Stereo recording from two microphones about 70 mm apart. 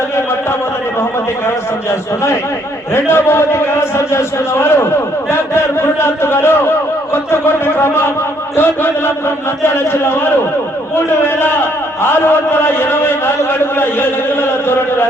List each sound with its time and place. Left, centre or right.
1.5 s a man's voice: left
7.1 s a sound: left
8.5 s chant: left
9.6 s a man's voice: left